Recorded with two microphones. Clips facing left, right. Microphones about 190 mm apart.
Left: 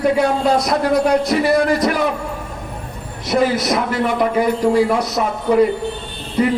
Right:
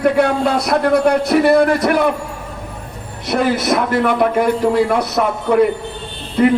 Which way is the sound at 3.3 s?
60° right (ahead or behind).